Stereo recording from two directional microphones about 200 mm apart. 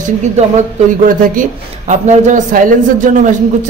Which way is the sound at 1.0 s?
40° right (ahead or behind).